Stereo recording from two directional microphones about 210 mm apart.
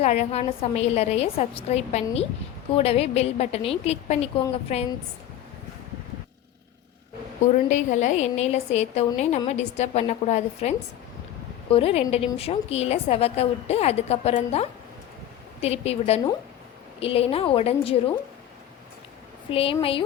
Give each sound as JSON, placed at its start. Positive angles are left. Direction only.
{"t": 0.0, "sound": "a woman's voice", "side_deg": 30}
{"t": 7.7, "sound": "a woman's voice", "side_deg": 35}
{"t": 19.5, "sound": "a woman's voice", "side_deg": 25}